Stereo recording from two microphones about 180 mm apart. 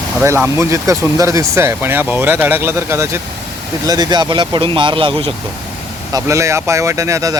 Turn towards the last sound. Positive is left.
turn(degrees=-20)  # may be behind; listen again after turning